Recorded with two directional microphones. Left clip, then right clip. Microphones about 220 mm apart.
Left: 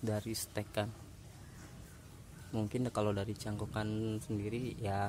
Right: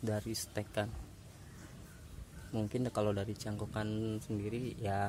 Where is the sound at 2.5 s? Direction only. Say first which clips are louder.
Even; centre (ahead or behind).